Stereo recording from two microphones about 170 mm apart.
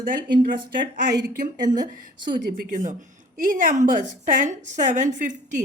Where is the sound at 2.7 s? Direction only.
45° right (ahead or behind).